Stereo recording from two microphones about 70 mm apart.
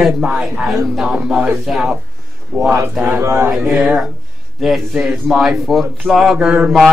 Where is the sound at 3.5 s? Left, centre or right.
Centre.